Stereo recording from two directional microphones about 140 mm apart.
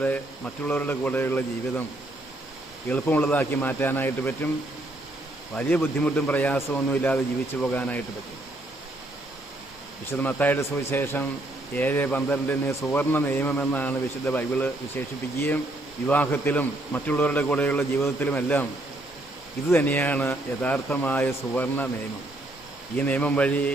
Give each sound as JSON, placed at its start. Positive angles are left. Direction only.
{"t": 0.0, "sound": "a man's voice", "side_deg": 10}
{"t": 2.9, "sound": "a man's voice", "side_deg": 10}
{"t": 5.5, "sound": "a man's voice", "side_deg": 10}
{"t": 10.1, "sound": "a man's voice", "side_deg": 15}
{"t": 19.7, "sound": "a man's voice", "side_deg": 15}
{"t": 23.0, "sound": "a man's voice", "side_deg": 10}